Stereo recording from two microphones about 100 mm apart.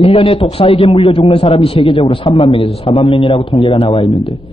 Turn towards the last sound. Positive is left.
turn(degrees=60)  # may be behind; listen again after turning